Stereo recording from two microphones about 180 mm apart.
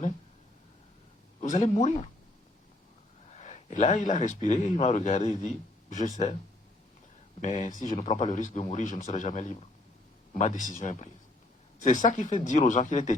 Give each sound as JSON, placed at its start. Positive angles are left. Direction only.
{"t": 1.4, "sound": "speech", "side_deg": 40}
{"t": 3.3, "sound": "speech", "side_deg": 40}
{"t": 7.4, "sound": "speech", "side_deg": 45}